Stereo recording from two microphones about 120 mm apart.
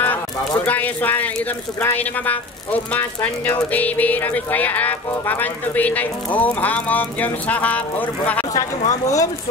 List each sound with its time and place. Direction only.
0.7 s speech: 15° left (ahead or behind)
8.5 s speech: 30° left (ahead or behind)